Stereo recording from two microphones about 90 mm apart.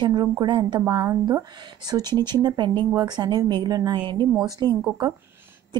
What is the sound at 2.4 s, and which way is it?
Speech, 60° right (ahead or behind).